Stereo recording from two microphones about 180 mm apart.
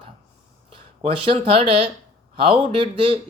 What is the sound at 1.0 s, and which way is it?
A man's voice, 30° right (ahead or behind).